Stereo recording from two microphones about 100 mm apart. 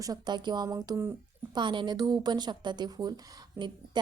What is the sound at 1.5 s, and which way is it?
A woman's voice, 50° right (ahead or behind).